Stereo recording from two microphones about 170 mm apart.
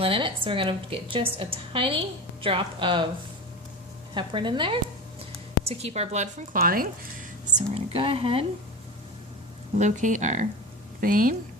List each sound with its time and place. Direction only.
0.0 s a woman's voice: 30° right (ahead or behind)
4.1 s a woman's voice: 30° right (ahead or behind); by 6.6 s 45° right (ahead or behind)
6.6 s speech: 55° right (ahead or behind)
7.7 s a woman's voice: 35° right (ahead or behind)
9.7 s speech: 45° right (ahead or behind)